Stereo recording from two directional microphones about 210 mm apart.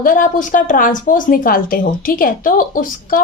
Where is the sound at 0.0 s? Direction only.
40° left (ahead or behind).